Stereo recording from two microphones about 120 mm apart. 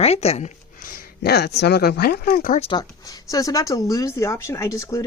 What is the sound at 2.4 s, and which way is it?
Speech, 90° left.